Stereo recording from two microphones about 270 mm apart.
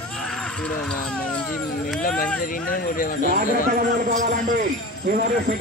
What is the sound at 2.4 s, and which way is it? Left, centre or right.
Speech, left.